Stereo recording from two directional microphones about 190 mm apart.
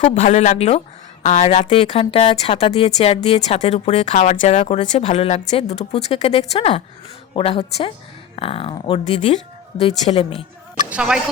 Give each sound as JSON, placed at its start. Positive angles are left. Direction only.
{"t": 0.0, "sound": "a woman's voice", "side_deg": 35}
{"t": 10.8, "sound": "a man's voice", "side_deg": -5}